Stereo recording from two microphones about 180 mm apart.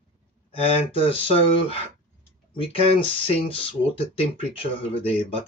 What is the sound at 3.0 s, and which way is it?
Speech, 30° left (ahead or behind).